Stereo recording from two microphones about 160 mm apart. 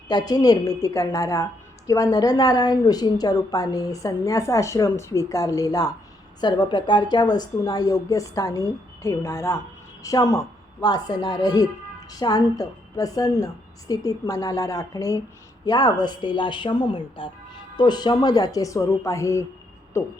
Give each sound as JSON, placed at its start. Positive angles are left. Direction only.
{"t": 0.1, "sound": "speech", "side_deg": 25}